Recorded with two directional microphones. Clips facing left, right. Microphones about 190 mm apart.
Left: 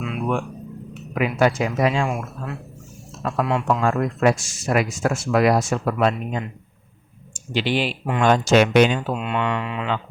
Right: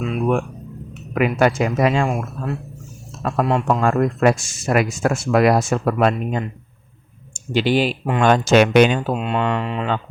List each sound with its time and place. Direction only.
0.0 s music: 45° right (ahead or behind)
1.1 s speech: 55° right (ahead or behind)
3.2 s speech: 45° right (ahead or behind)
7.5 s speech: 45° right (ahead or behind)
8.2 s speech: 60° right (ahead or behind)
9.0 s speech: 40° right (ahead or behind)